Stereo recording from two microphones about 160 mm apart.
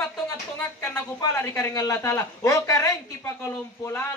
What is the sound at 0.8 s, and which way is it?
A man's voice, 20° left (ahead or behind).